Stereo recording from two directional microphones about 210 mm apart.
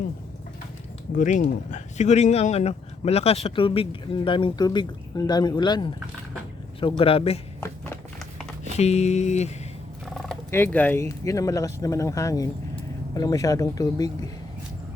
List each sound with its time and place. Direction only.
1.1 s speech: 35° left (ahead or behind)
8.8 s speech: 30° left (ahead or behind)
10.2 s speech: 10° left (ahead or behind)